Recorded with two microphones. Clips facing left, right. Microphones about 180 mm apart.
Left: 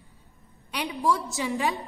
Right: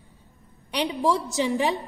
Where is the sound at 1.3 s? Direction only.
20° right (ahead or behind).